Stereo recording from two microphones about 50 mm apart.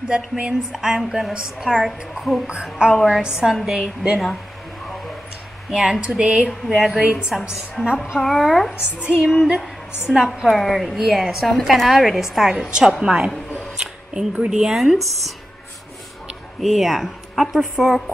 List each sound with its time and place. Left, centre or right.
0.1 s speech: centre
1.7 s a woman's voice: centre
2.4 s speech: centre
5.7 s speech: centre
7.8 s a woman's voice: left
8.2 s a woman's voice: centre
10.5 s a woman's voice: centre
13.7 s a sound: centre
14.6 s speech: centre
16.6 s a woman's voice: centre